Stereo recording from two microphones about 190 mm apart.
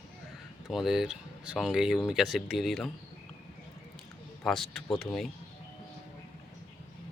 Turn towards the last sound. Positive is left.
turn(degrees=0)  # may be behind; listen again after turning